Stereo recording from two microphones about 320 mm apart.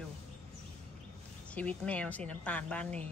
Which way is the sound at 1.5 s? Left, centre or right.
Centre.